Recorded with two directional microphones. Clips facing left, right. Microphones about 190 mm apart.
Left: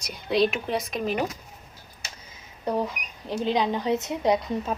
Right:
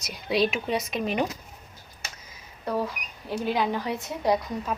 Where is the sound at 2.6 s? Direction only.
20° left (ahead or behind).